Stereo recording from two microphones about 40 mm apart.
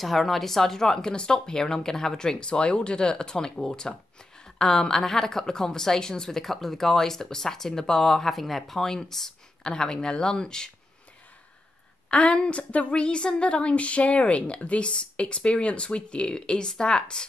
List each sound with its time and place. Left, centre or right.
0.0 s a woman's voice: centre
12.1 s a woman's voice: left